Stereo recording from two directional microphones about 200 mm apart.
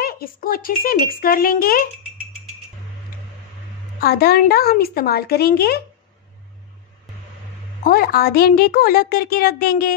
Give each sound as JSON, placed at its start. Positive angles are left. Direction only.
{"t": 0.0, "sound": "a woman's voice", "side_deg": 45}
{"t": 4.0, "sound": "a woman's voice", "side_deg": 50}
{"t": 7.8, "sound": "a woman's voice", "side_deg": 45}